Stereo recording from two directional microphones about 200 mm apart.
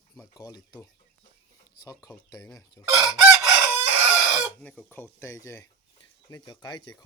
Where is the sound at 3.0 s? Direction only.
5° right (ahead or behind).